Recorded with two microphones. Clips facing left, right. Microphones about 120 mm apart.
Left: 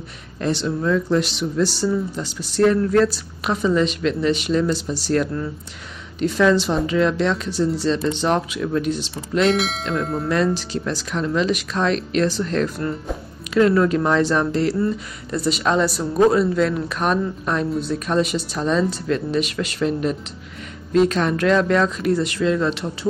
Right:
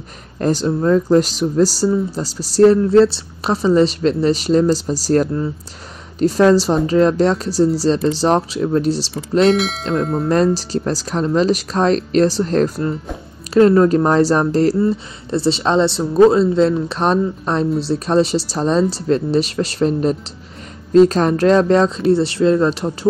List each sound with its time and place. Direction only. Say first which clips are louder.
0.4 s speech: right 5 dB; 40° right (ahead or behind)
9.5 s speech: right 4 dB; centre (ahead or behind)
10.2 s speech: right 5 dB; 40° right (ahead or behind)